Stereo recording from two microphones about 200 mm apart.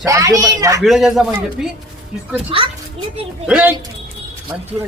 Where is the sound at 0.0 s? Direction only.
15° right (ahead or behind).